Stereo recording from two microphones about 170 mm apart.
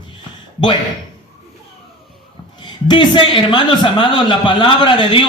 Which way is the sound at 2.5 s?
25° left (ahead or behind).